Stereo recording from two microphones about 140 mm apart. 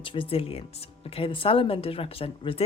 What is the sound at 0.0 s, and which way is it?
Speech, 40° left (ahead or behind).